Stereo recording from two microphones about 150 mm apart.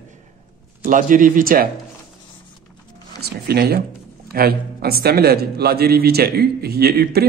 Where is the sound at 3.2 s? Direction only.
90° right.